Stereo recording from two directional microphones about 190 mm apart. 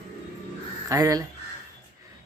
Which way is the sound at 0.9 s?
15° right (ahead or behind).